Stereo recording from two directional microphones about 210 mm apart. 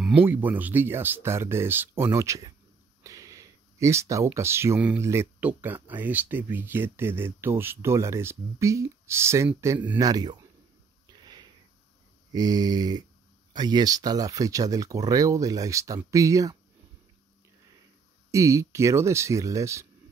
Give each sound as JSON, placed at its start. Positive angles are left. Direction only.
{"t": 0.0, "sound": "speech", "side_deg": -10}
{"t": 11.1, "sound": "sniff", "side_deg": -20}
{"t": 12.3, "sound": "mantra", "side_deg": -20}
{"t": 13.5, "sound": "speech", "side_deg": -20}
{"t": 18.3, "sound": "speech", "side_deg": -15}